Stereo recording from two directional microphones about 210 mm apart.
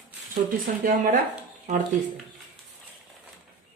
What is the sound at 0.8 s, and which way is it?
Speech, 40° right (ahead or behind).